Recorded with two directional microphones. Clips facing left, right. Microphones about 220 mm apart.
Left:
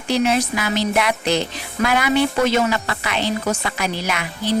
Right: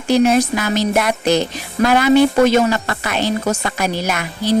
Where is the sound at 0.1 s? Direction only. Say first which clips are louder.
Right 5 dB; 45° right (ahead or behind).